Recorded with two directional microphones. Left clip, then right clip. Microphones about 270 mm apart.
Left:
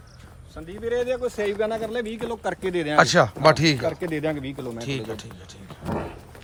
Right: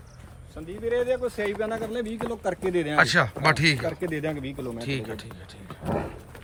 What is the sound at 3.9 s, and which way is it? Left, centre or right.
Speech, left.